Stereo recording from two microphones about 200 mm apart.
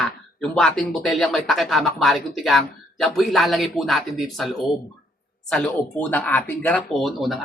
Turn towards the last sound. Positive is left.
turn(degrees=0)  # may be behind; listen again after turning